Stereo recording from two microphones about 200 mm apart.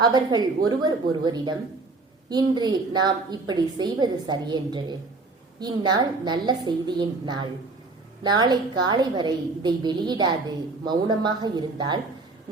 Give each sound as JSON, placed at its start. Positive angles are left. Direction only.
{"t": 0.0, "sound": "a woman's voice", "side_deg": -20}